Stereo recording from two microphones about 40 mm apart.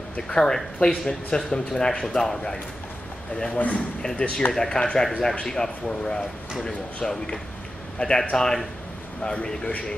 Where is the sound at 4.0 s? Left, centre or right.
Centre.